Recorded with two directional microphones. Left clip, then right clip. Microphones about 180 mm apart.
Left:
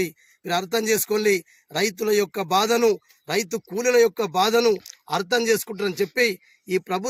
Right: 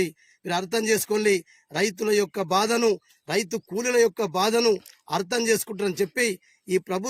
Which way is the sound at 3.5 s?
15° right (ahead or behind).